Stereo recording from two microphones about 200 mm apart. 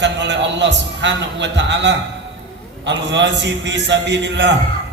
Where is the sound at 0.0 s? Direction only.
60° right (ahead or behind).